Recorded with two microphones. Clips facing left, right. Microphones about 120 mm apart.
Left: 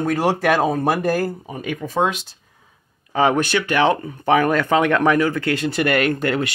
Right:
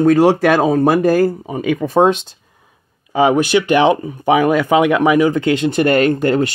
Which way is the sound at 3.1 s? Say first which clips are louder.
Right 5 dB; 10° right (ahead or behind).